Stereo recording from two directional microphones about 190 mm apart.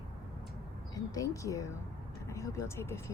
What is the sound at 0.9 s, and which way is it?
Speech, 20° left (ahead or behind).